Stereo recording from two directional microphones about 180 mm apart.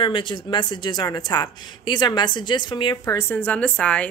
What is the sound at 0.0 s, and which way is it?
Speech, 25° left (ahead or behind).